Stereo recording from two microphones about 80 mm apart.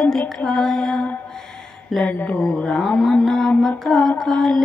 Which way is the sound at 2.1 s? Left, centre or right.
Left.